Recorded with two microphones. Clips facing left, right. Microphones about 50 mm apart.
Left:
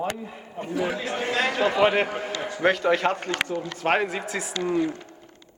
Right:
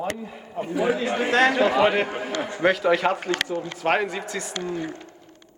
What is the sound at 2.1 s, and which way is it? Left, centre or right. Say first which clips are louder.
A man's voice: right 2 dB; centre.